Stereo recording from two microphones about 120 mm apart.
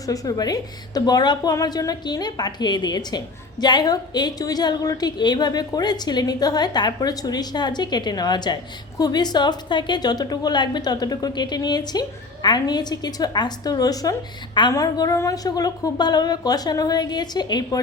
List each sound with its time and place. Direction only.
0.0 s a woman's voice: 30° left (ahead or behind)